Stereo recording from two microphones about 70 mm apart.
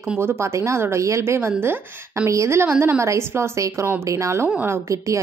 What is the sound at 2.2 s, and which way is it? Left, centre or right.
A woman's voice, right.